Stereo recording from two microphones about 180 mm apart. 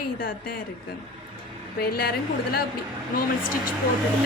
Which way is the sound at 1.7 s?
60° left (ahead or behind).